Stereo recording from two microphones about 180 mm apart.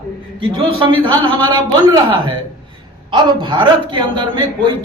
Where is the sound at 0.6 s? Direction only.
30° right (ahead or behind).